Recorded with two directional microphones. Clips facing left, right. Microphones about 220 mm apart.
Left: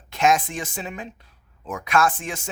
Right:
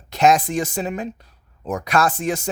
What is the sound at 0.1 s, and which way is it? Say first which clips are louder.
Speech: right 4 dB; 40° right (ahead or behind).